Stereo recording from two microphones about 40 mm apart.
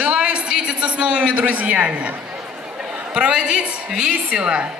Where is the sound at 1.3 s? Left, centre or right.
Right.